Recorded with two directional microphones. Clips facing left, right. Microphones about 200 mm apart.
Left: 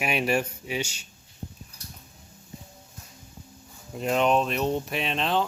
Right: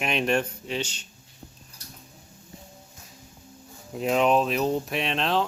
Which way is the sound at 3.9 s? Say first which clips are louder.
Right 1 dB; centre (ahead or behind).